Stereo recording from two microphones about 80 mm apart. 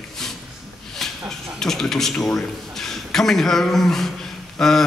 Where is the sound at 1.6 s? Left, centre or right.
Centre.